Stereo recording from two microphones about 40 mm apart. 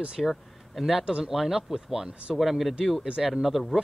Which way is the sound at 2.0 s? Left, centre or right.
Right.